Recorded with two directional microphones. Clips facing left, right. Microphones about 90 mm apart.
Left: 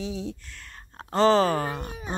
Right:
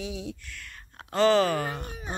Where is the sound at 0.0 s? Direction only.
35° left (ahead or behind).